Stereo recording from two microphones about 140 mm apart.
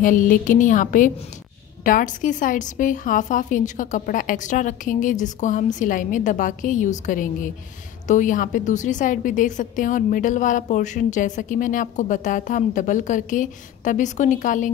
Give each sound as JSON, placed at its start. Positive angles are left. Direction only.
{"t": 0.0, "sound": "a woman's voice", "side_deg": 70}